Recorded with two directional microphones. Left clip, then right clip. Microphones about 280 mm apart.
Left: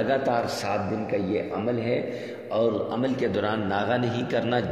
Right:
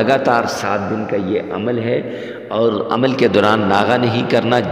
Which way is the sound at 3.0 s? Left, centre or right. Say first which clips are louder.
Right 15 dB; right.